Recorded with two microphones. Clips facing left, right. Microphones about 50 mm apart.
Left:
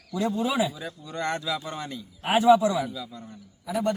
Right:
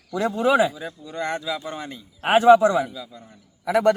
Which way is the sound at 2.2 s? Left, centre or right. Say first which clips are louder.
Right 5 dB; right.